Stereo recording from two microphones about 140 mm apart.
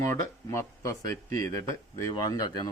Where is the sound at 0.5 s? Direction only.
20° left (ahead or behind).